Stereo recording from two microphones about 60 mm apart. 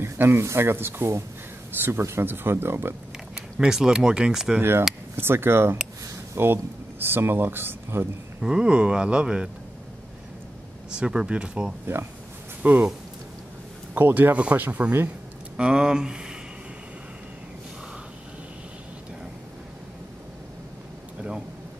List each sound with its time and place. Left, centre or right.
0.0 s speech: right
3.3 s speech: centre
4.6 s speech: right
8.4 s speech: centre
10.9 s speech: centre
12.6 s speech: right
13.9 s speech: right
14.3 s speech: right
15.5 s speech: centre